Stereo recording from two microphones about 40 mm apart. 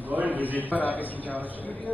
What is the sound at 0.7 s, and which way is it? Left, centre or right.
Speech, left.